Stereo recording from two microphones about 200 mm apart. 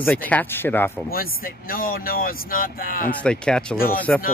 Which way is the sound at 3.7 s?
45° left (ahead or behind).